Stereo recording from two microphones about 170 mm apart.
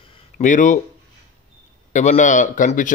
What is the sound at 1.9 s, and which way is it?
A man's voice, 45° left (ahead or behind).